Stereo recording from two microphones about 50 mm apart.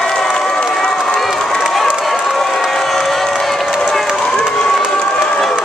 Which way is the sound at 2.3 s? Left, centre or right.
Centre.